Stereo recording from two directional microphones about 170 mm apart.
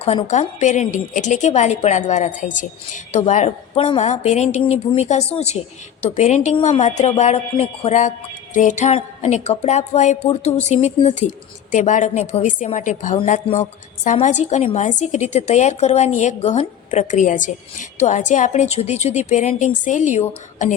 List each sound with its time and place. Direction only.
0.3 s a woman's voice: 45° left (ahead or behind)